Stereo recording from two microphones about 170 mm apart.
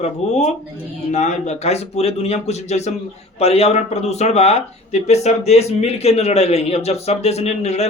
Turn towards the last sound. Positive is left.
turn(degrees=40)  # may be behind; listen again after turning